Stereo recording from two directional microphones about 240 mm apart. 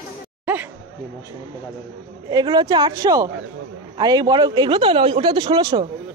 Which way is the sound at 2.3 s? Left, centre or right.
Centre.